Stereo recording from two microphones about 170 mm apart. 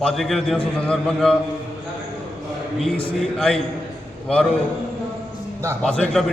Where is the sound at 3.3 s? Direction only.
5° left (ahead or behind).